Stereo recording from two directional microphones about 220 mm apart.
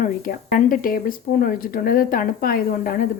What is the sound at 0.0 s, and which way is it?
Speech, 40° left (ahead or behind).